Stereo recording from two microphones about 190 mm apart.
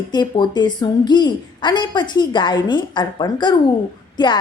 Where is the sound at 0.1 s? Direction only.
25° left (ahead or behind).